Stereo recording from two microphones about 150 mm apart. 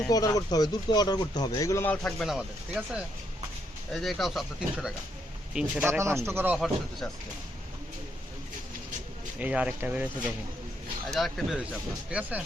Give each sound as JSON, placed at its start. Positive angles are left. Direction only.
{"t": 0.1, "sound": "speech", "side_deg": 25}
{"t": 5.9, "sound": "speech", "side_deg": -15}
{"t": 9.4, "sound": "speech", "side_deg": -10}
{"t": 11.1, "sound": "speech", "side_deg": 0}